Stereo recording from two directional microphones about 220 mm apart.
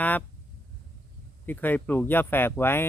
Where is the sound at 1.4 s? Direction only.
10° left (ahead or behind).